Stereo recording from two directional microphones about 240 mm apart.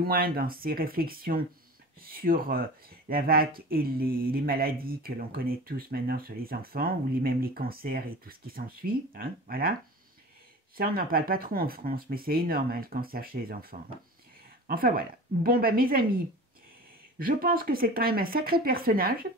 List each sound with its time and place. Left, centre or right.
0.0 s speech: right
10.8 s speech: right
17.2 s speech: right